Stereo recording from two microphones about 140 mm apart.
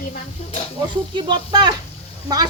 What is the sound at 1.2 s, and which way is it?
Speech, 35° right (ahead or behind).